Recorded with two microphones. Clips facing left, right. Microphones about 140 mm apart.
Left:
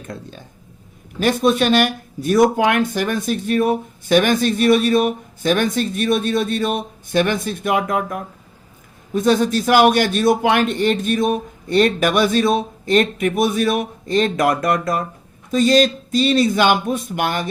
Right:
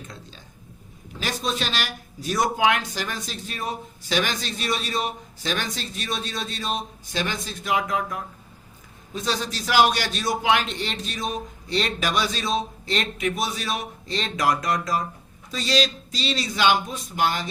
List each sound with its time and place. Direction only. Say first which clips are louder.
0.1 s a man's voice: left 10 dB; 55° left (ahead or behind)